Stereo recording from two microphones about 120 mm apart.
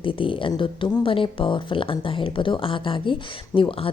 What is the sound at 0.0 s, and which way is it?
Speech, 45° left (ahead or behind).